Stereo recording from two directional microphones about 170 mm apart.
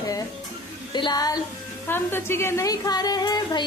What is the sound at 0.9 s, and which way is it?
A woman's voice, 25° left (ahead or behind).